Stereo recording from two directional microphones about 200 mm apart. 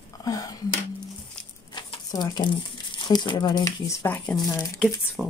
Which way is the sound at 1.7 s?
20° left (ahead or behind).